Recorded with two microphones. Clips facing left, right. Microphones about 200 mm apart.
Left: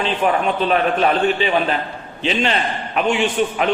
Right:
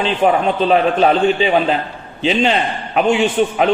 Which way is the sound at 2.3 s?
35° right (ahead or behind).